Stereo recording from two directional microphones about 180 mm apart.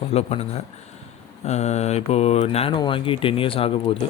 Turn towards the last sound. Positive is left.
turn(degrees=30)  # may be behind; listen again after turning